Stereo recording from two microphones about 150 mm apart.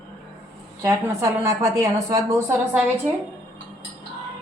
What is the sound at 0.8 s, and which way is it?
A woman's voice, 20° right (ahead or behind).